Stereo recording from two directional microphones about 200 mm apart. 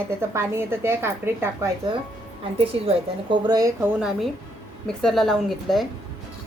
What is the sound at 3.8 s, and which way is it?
A woman's voice, 5° right (ahead or behind).